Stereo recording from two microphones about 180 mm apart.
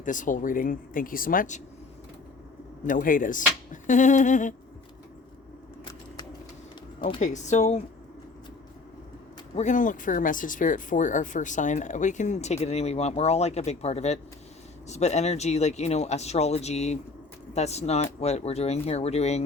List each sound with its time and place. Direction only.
0.0 s speech: 45° left (ahead or behind)
2.8 s speech: 50° left (ahead or behind)
7.2 s speech: 40° left (ahead or behind)
9.6 s speech: 45° left (ahead or behind)